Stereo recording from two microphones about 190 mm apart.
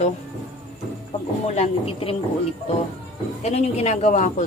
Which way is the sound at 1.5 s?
30° left (ahead or behind).